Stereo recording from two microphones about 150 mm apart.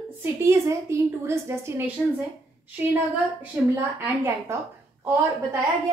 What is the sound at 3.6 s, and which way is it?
A woman's voice, 10° right (ahead or behind).